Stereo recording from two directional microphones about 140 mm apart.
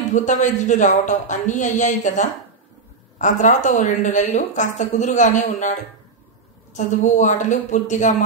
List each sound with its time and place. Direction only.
0.1 s a woman's voice: 60° left (ahead or behind)